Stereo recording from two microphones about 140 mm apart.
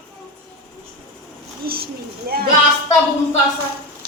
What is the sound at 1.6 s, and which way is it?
Speech, 90° right.